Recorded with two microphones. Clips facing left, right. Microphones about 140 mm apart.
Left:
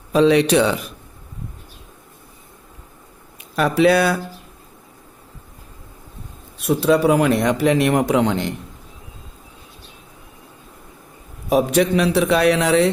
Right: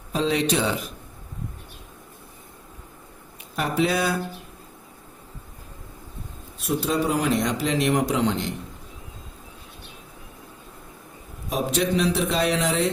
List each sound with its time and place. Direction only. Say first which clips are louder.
0.1 s a man's voice: left 9 dB; 75° left (ahead or behind)
3.5 s a man's voice: left 8 dB; 75° left (ahead or behind)
6.7 s a man's voice: left 8 dB; 70° left (ahead or behind)
11.4 s a man's voice: left 8 dB; 65° left (ahead or behind)